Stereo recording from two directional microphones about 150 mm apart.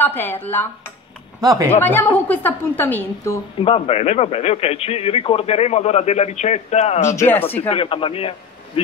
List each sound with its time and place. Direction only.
0.0 s a woman's voice: 15° left (ahead or behind)
1.4 s speech: 25° right (ahead or behind)
1.8 s a woman's voice: 15° left (ahead or behind)
3.5 s a man's voice: 40° left (ahead or behind)
7.1 s a woman's voice: 15° left (ahead or behind)
7.6 s a man's voice: 35° left (ahead or behind)